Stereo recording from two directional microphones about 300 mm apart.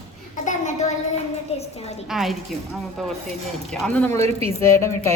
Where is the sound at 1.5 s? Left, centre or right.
Centre.